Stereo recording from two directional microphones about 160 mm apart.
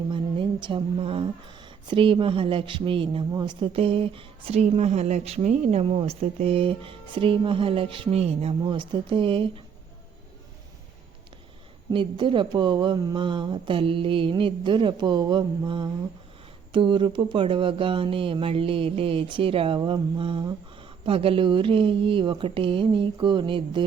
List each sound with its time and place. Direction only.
0.1 s a sound: 30° right (ahead or behind)
1.9 s a man's voice: 30° right (ahead or behind)
11.9 s a man's voice: 30° right (ahead or behind)